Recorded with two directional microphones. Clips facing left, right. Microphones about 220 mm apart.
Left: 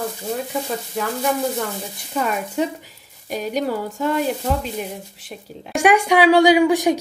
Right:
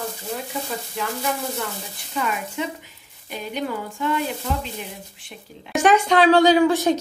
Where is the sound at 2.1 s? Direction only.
40° left (ahead or behind).